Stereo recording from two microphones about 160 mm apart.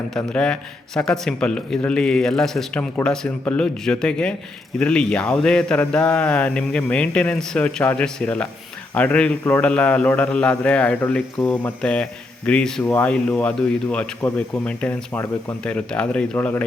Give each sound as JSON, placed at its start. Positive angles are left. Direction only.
{"t": 0.1, "sound": "a man's voice", "side_deg": 5}